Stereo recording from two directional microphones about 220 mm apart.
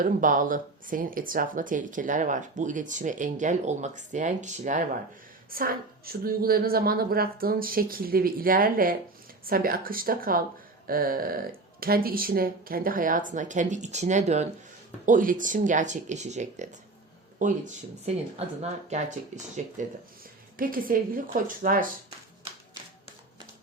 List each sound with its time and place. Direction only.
0.0 s speech: 40° right (ahead or behind)
18.0 s speech: 30° right (ahead or behind)
20.6 s speech: 40° right (ahead or behind)